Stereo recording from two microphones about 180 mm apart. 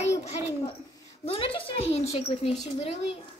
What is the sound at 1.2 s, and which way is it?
A woman's voice, 30° left (ahead or behind).